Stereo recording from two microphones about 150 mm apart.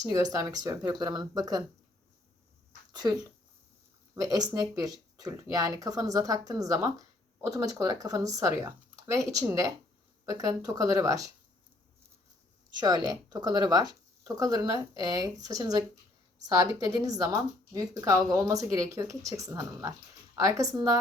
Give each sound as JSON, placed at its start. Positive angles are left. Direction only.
{"t": 0.0, "sound": "a woman's voice", "side_deg": -25}
{"t": 2.9, "sound": "a woman's voice", "side_deg": -25}
{"t": 13.3, "sound": "a woman's voice", "side_deg": -30}
{"t": 16.8, "sound": "a woman's voice", "side_deg": -25}